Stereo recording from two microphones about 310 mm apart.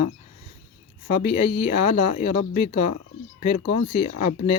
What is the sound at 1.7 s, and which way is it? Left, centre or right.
Speech, left.